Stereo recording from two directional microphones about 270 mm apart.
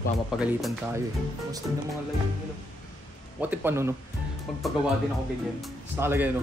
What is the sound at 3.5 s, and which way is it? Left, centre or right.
Speech, centre.